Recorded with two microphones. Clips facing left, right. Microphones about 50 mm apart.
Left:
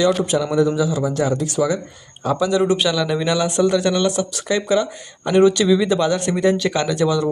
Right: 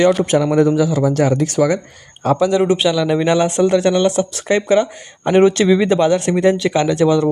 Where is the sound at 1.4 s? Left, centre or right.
Right.